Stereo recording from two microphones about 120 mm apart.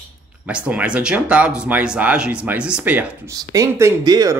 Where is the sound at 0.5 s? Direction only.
10° right (ahead or behind).